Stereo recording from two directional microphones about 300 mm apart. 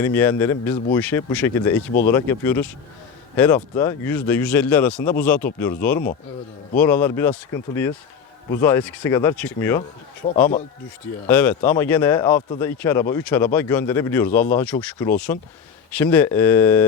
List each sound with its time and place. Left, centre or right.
0.0 s speech: centre
8.4 s speech: centre
10.2 s a man's voice: left
11.3 s speech: centre